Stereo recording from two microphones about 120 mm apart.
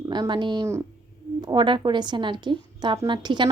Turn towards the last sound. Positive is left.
turn(degrees=-40)  # may be behind; listen again after turning